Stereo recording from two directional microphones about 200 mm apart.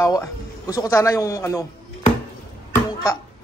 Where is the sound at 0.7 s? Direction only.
15° left (ahead or behind).